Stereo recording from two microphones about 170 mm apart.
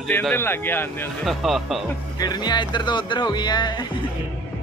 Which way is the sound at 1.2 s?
Centre (ahead or behind).